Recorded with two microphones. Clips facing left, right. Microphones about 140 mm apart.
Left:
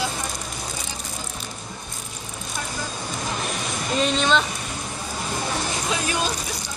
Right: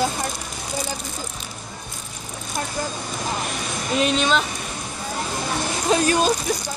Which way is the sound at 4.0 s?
5° right (ahead or behind).